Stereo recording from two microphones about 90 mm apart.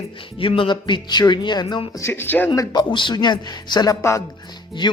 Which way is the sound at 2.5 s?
50° left (ahead or behind).